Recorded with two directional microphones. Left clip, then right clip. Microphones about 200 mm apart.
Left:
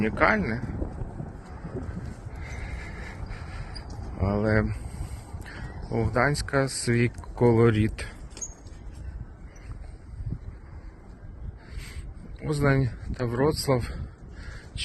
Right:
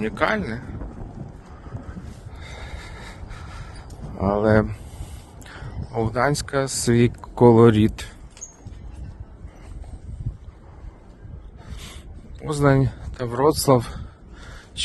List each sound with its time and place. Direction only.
0.0 s speech: 25° right (ahead or behind)
2.6 s a sound: 20° right (ahead or behind)
4.1 s speech: 25° right (ahead or behind)
12.4 s speech: 25° right (ahead or behind)